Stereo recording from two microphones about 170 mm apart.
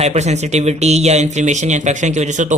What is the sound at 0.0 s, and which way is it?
Speech, 40° right (ahead or behind).